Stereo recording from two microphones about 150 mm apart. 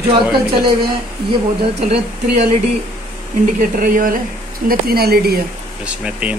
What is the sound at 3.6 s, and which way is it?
Speech, 65° right (ahead or behind).